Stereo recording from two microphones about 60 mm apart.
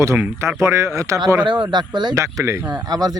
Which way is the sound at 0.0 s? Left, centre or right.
Right.